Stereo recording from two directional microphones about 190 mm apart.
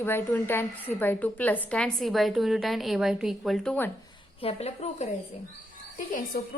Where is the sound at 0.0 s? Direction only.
10° left (ahead or behind).